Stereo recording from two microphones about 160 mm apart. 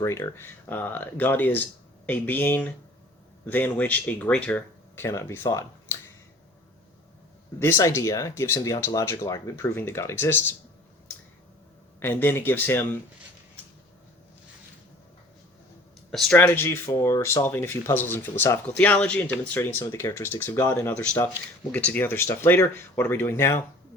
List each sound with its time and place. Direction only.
0.0 s speech: 15° left (ahead or behind)
7.6 s speech: 15° left (ahead or behind)
11.9 s speech: 15° left (ahead or behind)
16.1 s speech: 10° left (ahead or behind)